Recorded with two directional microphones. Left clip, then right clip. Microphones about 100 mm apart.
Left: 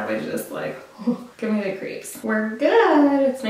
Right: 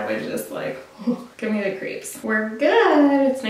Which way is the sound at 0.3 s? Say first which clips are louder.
Even; 5° left (ahead or behind).